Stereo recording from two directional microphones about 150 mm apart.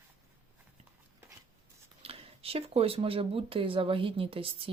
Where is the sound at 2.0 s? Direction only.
40° right (ahead or behind).